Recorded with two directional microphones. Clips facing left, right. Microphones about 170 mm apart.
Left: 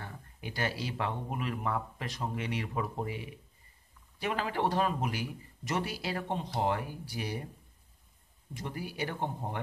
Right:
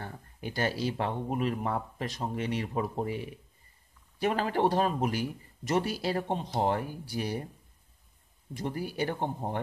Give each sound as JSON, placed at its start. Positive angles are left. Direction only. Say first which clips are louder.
{"t": 0.0, "sound": "speech", "louder": "right 4 dB", "side_deg": -40}
{"t": 8.5, "sound": "speech", "louder": "right 5 dB", "side_deg": -40}